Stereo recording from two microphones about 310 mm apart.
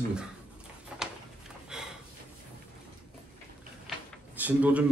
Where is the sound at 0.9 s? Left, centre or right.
Centre.